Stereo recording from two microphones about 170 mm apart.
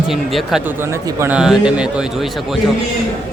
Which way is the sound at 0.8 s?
15° right (ahead or behind).